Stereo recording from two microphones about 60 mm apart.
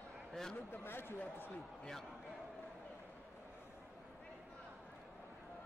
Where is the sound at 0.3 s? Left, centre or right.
Centre.